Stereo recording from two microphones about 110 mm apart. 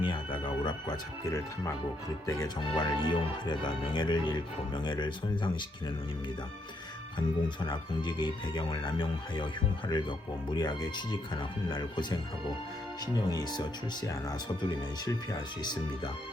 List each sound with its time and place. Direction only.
0.0 s speech: 45° left (ahead or behind); by 2.5 s 30° left (ahead or behind)
2.6 s speech: 40° left (ahead or behind)
7.2 s speech: 45° left (ahead or behind)